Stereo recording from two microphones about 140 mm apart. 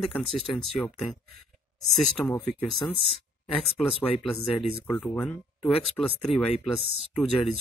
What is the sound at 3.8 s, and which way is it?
Speech, centre (ahead or behind).